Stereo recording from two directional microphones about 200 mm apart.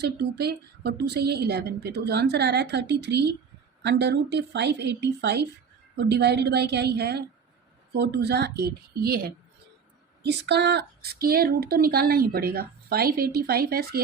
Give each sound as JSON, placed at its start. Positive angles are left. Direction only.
{"t": 0.0, "sound": "a woman's voice", "side_deg": -55}